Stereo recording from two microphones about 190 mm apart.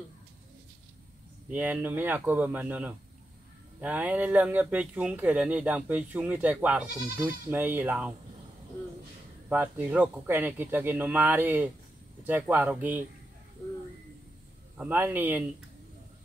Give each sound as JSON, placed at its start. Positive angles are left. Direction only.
{"t": 1.5, "sound": "speech", "side_deg": -10}
{"t": 9.5, "sound": "speech", "side_deg": -10}
{"t": 14.8, "sound": "speech", "side_deg": -10}